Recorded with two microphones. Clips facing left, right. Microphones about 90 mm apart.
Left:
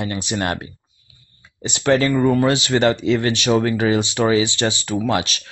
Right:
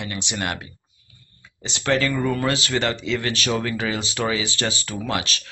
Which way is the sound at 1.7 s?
30° left (ahead or behind).